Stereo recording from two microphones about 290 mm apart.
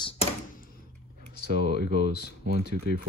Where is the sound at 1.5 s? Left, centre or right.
Right.